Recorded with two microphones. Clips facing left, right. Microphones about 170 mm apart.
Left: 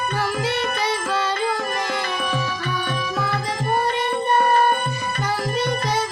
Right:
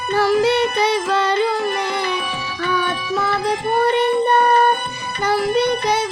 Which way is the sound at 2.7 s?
65° right (ahead or behind).